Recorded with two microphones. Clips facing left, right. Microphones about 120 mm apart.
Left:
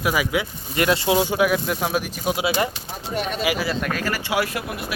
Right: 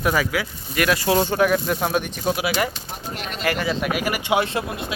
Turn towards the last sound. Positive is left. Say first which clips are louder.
# right 2 dB
turn(degrees=-25)  # may be behind; listen again after turning